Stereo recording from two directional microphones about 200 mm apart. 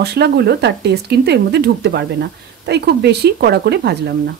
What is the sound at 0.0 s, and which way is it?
Speech, 55° right (ahead or behind).